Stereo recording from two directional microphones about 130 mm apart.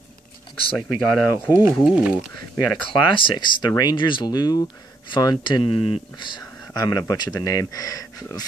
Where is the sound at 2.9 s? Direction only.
40° left (ahead or behind).